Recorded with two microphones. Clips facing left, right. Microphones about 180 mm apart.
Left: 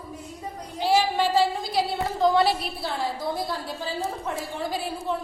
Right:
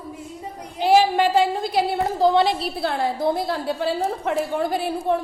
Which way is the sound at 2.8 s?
60° right (ahead or behind).